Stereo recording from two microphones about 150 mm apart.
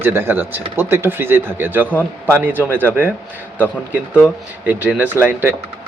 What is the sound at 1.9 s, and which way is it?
Speech, 10° left (ahead or behind).